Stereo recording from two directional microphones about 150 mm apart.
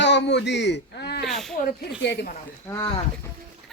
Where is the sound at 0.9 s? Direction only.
90° left.